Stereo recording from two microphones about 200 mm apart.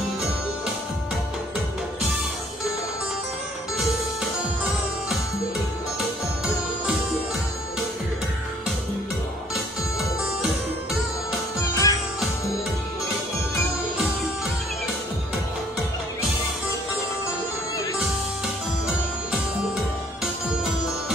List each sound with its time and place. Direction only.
3.7 s music: centre (ahead or behind)
11.6 s music: 15° left (ahead or behind)